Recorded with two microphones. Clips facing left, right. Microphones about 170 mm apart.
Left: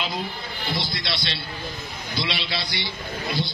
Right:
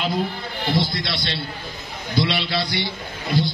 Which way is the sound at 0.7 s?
50° right (ahead or behind).